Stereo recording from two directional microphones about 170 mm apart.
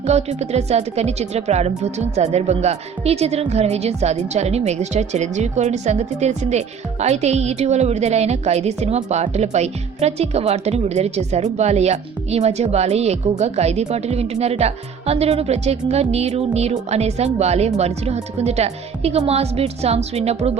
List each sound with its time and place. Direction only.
0.0 s speech: 40° right (ahead or behind)